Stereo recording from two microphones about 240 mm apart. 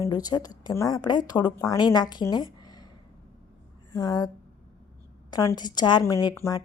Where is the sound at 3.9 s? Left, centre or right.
Centre.